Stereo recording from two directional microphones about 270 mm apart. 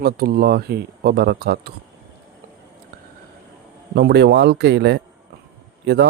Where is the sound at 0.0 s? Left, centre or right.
Right.